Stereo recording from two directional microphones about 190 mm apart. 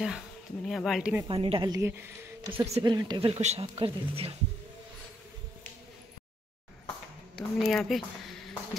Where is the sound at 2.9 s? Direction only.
20° right (ahead or behind).